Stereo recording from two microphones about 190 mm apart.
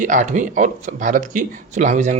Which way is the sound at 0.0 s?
40° right (ahead or behind).